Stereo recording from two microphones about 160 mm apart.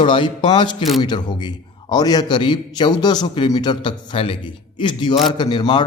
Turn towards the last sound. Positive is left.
turn(degrees=30)  # may be behind; listen again after turning